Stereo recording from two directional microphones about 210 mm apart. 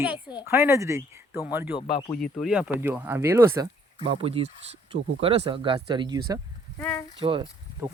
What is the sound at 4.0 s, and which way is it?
Speech, 25° right (ahead or behind).